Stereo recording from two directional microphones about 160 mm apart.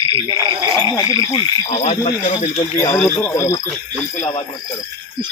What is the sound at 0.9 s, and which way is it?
Speech, 20° left (ahead or behind).